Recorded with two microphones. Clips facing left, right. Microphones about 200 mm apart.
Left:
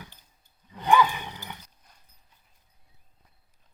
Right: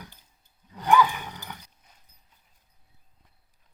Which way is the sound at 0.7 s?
5° right (ahead or behind).